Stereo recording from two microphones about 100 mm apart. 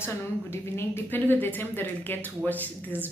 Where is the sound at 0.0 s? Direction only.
25° left (ahead or behind).